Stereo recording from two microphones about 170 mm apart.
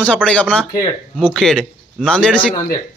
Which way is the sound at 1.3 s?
5° left (ahead or behind).